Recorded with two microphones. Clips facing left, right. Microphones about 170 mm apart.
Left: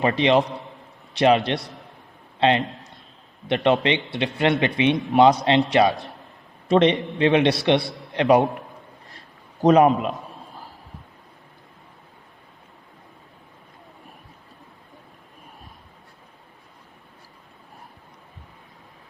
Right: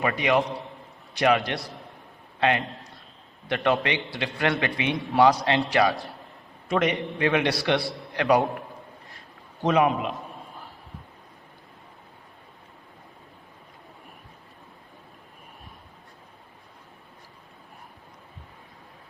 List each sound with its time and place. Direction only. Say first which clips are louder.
0.0 s a man's voice: left 4 dB; 25° left (ahead or behind)
9.6 s a man's voice: left 6 dB; 40° left (ahead or behind)